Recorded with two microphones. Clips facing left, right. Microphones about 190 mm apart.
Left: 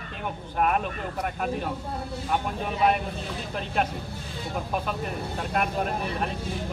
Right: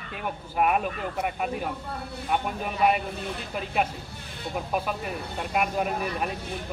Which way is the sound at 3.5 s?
5° right (ahead or behind).